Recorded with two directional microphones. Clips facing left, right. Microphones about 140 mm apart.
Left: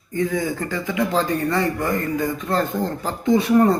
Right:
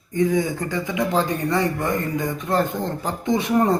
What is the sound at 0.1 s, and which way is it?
Speech, 20° right (ahead or behind).